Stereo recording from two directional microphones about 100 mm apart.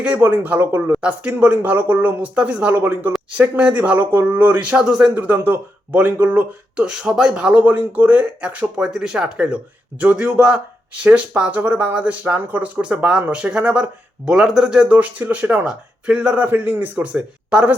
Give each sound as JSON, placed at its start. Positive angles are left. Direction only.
{"t": 0.0, "sound": "speech", "side_deg": -15}